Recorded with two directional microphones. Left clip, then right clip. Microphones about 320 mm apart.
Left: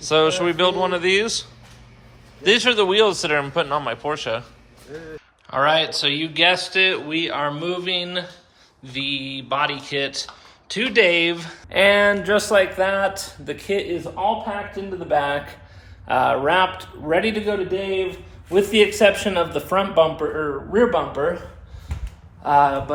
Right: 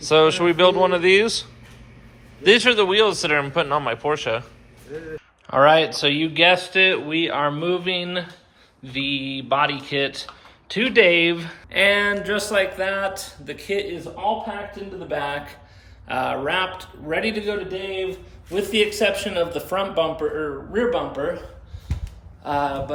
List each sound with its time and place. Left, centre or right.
0.0 s a man's voice: centre
4.9 s speech: left
5.5 s a man's voice: centre
22.4 s a man's voice: centre